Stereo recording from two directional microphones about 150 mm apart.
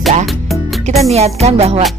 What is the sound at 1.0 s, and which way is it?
Music, 45° right (ahead or behind).